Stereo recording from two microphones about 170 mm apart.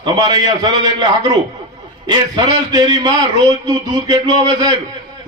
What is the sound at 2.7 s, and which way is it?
A man's voice, 20° right (ahead or behind).